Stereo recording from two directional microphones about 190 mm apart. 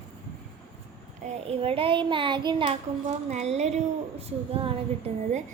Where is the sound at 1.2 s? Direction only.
30° right (ahead or behind).